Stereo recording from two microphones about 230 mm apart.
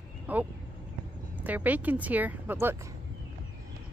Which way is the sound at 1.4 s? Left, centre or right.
Centre.